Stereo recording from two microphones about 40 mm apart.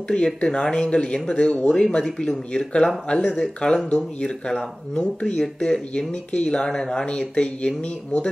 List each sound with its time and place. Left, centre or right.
0.1 s speech: left